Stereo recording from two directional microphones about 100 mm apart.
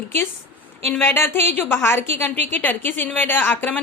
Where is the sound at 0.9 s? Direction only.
25° left (ahead or behind).